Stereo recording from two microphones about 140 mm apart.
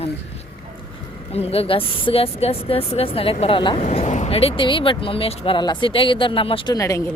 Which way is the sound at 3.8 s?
55° left (ahead or behind).